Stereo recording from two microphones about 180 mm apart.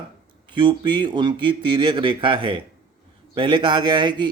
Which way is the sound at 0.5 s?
25° right (ahead or behind).